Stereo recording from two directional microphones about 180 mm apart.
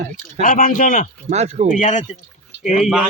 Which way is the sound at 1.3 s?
40° right (ahead or behind).